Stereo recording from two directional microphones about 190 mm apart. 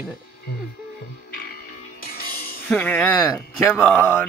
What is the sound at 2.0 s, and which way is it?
Music, 50° left (ahead or behind).